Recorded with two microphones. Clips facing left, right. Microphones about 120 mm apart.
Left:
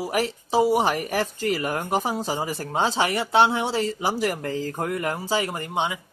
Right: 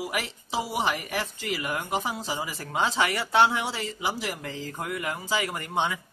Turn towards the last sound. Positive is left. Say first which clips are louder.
# left 2 dB
turn(degrees=15)  # may be behind; listen again after turning